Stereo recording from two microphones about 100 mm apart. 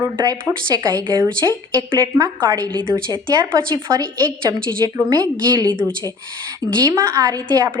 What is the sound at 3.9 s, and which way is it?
A woman's voice, 35° right (ahead or behind).